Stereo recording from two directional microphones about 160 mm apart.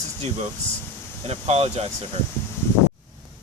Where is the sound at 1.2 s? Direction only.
40° right (ahead or behind).